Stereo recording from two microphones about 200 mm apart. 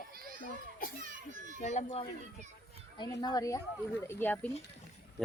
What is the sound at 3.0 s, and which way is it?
A woman's voice, 20° left (ahead or behind).